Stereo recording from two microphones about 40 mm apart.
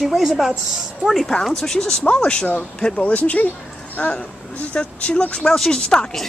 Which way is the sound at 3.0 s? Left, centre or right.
Left.